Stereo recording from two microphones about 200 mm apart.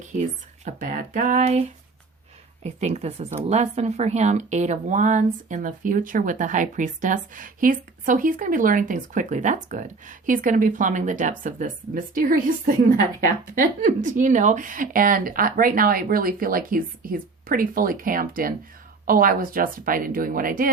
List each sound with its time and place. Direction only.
0.0 s a woman's voice: 35° right (ahead or behind)